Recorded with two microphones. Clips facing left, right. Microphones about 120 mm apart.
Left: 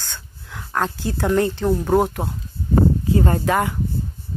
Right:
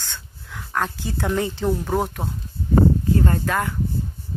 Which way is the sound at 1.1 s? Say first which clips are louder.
Left 5 dB; centre (ahead or behind).